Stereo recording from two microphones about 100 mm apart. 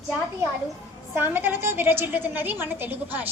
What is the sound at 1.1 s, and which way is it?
A woman's voice, 20° right (ahead or behind).